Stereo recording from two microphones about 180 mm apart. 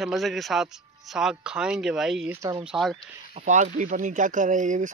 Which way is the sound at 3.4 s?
45° right (ahead or behind).